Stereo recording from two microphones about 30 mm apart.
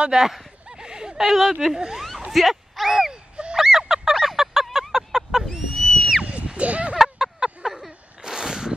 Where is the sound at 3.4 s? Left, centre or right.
Right.